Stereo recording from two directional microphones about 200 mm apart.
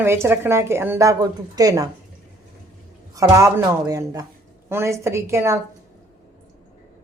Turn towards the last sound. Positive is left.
turn(degrees=-15)  # may be behind; listen again after turning